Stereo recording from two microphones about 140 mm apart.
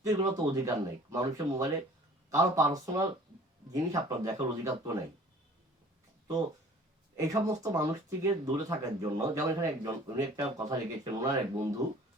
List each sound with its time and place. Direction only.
0.0 s speech: 25° right (ahead or behind)
7.2 s speech: 25° right (ahead or behind)